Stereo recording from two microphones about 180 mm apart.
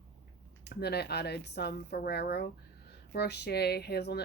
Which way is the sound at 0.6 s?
65° left (ahead or behind).